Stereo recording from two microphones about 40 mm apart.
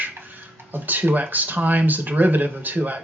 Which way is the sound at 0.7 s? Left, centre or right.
Right.